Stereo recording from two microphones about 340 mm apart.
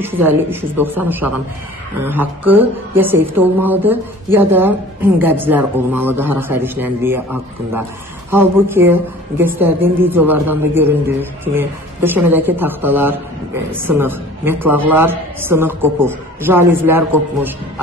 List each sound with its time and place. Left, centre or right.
0.0 s speech: centre
8.3 s a man's voice: centre